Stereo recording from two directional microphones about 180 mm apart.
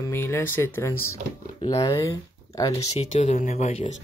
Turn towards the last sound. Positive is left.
turn(degrees=40)  # may be behind; listen again after turning